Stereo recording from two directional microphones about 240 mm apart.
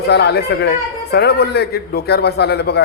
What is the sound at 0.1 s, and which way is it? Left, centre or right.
Speech, left.